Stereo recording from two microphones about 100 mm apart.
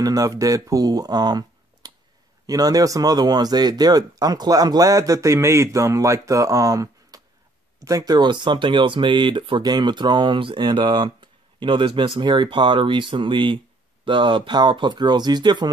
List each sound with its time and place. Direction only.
0.0 s speech: 35° right (ahead or behind)